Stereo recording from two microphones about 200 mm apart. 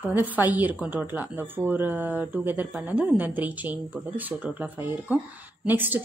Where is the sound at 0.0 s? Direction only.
10° right (ahead or behind).